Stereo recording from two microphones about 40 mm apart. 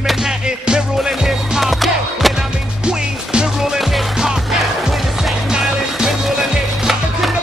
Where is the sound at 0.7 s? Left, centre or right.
Centre.